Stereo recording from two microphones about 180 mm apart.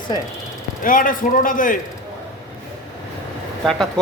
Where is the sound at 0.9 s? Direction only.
50° left (ahead or behind).